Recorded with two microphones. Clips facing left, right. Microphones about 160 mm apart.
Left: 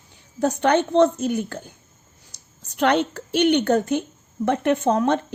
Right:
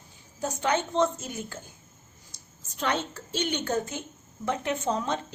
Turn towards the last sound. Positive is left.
turn(degrees=60)  # may be behind; listen again after turning